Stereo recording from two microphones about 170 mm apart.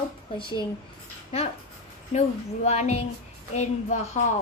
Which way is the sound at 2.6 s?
40° left (ahead or behind).